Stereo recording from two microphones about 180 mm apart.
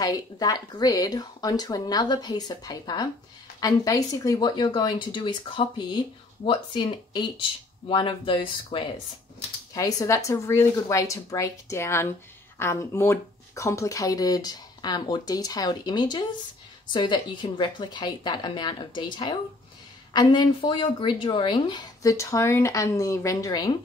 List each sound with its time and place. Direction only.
0.0 s speech: 20° left (ahead or behind)